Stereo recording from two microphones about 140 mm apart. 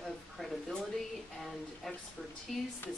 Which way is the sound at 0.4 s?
Centre (ahead or behind).